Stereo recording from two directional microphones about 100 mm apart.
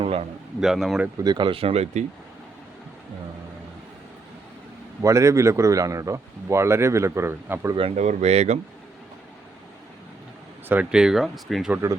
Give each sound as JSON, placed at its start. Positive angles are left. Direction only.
{"t": 0.0, "sound": "a sound", "side_deg": -80}
{"t": 0.6, "sound": "speech", "side_deg": -5}
{"t": 1.2, "sound": "speech", "side_deg": -50}
{"t": 5.0, "sound": "speech", "side_deg": -30}
{"t": 7.8, "sound": "speech", "side_deg": -80}
{"t": 10.9, "sound": "speech", "side_deg": -5}